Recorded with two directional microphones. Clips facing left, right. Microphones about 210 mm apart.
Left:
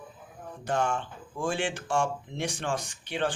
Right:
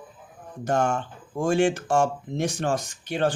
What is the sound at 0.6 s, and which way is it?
A man's voice, 45° right (ahead or behind).